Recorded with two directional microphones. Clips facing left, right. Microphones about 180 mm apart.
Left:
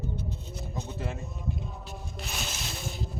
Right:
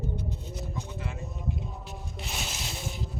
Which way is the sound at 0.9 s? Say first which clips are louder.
Left 3 dB; 35° left (ahead or behind).